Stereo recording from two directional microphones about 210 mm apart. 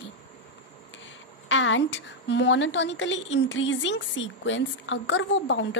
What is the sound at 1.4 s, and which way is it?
A woman's voice, 65° left (ahead or behind).